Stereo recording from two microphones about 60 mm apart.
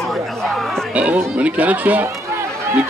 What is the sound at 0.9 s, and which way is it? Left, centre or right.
Music, right.